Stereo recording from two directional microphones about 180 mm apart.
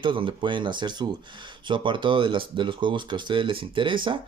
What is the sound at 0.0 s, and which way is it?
Speech, 30° right (ahead or behind).